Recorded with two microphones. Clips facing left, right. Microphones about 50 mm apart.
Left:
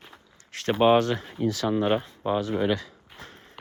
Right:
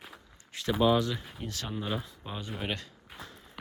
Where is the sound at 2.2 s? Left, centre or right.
Left.